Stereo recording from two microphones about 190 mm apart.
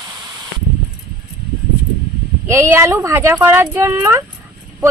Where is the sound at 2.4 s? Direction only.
15° right (ahead or behind).